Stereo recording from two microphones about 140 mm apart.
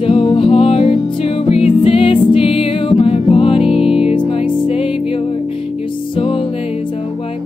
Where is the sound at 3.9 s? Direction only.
40° left (ahead or behind).